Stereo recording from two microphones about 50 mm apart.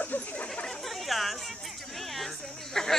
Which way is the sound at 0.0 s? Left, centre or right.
Left.